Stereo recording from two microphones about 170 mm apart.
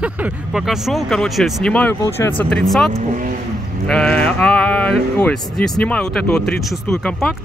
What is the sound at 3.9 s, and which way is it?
Speech, 5° left (ahead or behind).